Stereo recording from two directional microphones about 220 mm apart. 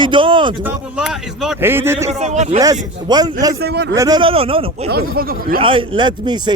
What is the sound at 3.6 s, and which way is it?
Speech, 50° right (ahead or behind).